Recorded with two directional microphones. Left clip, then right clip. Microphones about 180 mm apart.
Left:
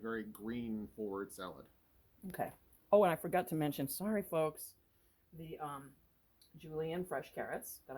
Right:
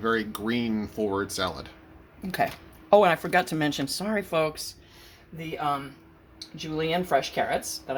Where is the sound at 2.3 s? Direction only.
35° left (ahead or behind).